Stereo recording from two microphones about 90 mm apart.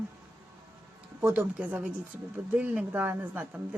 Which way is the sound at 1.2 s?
15° right (ahead or behind).